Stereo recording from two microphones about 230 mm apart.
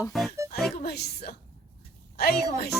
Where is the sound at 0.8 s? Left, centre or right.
Left.